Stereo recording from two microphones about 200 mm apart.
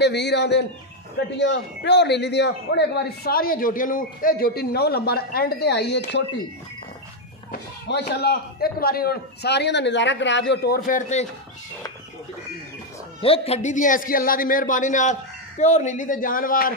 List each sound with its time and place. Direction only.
0.0 s a man's voice: 60° left (ahead or behind)
7.9 s a man's voice: 55° left (ahead or behind)
10.9 s a man's voice: 40° left (ahead or behind)
13.2 s a man's voice: 30° left (ahead or behind); by 16.7 s 45° left (ahead or behind)